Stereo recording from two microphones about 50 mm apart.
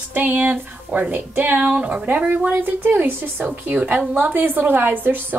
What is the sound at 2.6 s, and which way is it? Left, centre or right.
Speech, right.